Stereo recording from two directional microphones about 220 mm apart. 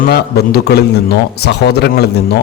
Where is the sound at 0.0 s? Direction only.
45° left (ahead or behind).